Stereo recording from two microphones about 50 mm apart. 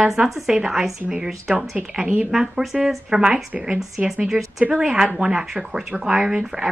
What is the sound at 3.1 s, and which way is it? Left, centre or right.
Speech, centre.